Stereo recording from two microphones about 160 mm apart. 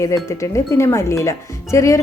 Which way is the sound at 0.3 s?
20° left (ahead or behind).